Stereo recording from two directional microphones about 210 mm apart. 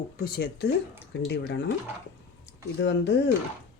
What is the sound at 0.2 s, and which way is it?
Speech, 45° left (ahead or behind).